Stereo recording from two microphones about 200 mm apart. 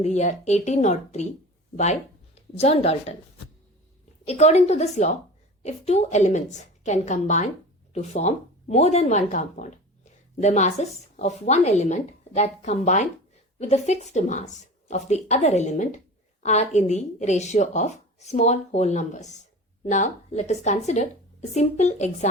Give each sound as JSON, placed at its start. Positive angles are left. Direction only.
{"t": 0.0, "sound": "speech", "side_deg": 35}
{"t": 4.3, "sound": "speech", "side_deg": 35}